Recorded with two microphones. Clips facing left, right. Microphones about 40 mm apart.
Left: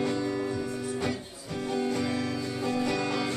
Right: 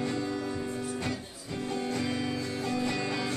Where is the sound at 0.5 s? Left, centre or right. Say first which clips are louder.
Left 2 dB; centre.